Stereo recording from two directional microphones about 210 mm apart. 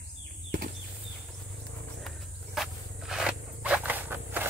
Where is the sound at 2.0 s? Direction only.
Centre (ahead or behind).